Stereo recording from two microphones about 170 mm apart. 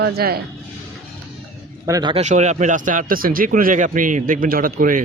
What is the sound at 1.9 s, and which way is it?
Speech, 20° right (ahead or behind).